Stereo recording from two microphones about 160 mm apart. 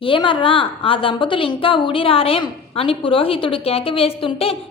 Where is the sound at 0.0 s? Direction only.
30° left (ahead or behind).